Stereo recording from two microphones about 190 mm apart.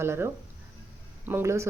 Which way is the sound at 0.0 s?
15° right (ahead or behind).